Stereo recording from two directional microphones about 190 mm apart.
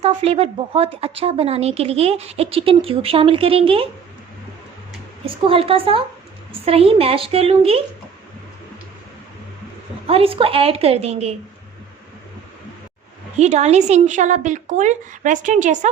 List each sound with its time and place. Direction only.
0.0 s a woman's voice: 30° right (ahead or behind)
5.2 s a woman's voice: 30° right (ahead or behind)
10.1 s a woman's voice: 30° right (ahead or behind)
13.4 s a woman's voice: 35° right (ahead or behind)